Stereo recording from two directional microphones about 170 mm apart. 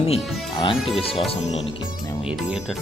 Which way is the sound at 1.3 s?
40° left (ahead or behind).